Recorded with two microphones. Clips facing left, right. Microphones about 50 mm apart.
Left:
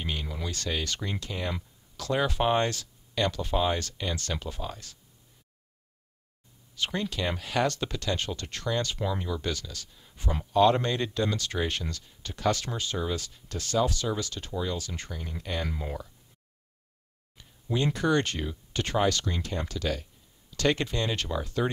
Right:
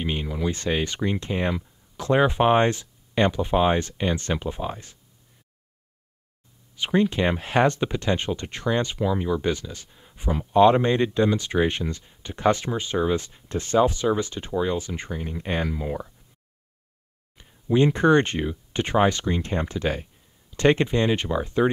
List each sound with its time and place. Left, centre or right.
0.0 s a sound: right
0.3 s speech: centre
6.7 s speech: centre
8.9 s speech: centre
9.3 s speech: right
15.7 s speech: centre
17.4 s a sound: right
17.9 s speech: right